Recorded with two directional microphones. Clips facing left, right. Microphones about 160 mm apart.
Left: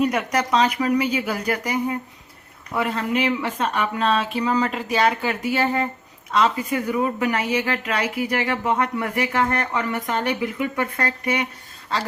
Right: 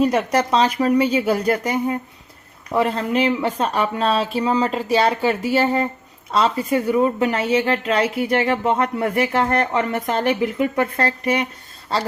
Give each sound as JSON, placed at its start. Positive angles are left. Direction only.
{"t": 0.0, "sound": "speech", "side_deg": -30}